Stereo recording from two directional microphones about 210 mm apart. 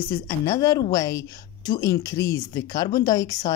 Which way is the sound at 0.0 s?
15° left (ahead or behind).